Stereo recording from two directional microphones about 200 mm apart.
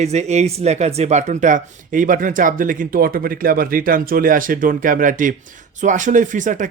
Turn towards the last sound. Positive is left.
turn(degrees=-40)  # may be behind; listen again after turning